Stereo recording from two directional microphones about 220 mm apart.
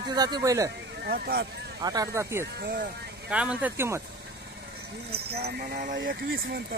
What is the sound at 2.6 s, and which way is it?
Speech, 40° right (ahead or behind).